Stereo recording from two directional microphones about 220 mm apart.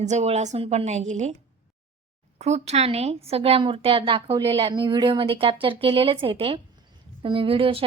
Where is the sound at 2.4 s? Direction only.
30° right (ahead or behind).